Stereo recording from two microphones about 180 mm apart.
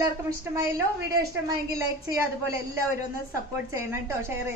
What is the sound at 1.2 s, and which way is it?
A woman's voice, 20° right (ahead or behind).